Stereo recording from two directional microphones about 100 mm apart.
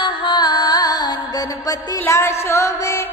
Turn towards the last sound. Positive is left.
turn(degrees=30)  # may be behind; listen again after turning